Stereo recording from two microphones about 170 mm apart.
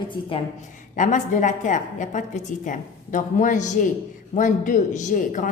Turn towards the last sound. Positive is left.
turn(degrees=50)  # may be behind; listen again after turning